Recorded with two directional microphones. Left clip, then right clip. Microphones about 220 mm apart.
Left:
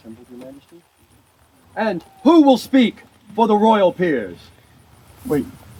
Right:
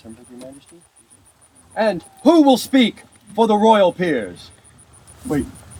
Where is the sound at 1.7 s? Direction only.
35° right (ahead or behind).